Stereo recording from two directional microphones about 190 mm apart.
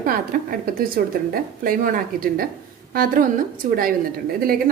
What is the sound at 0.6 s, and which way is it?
Speech, 50° right (ahead or behind).